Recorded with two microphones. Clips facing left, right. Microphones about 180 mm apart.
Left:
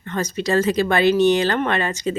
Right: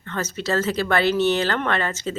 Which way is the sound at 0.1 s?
15° left (ahead or behind).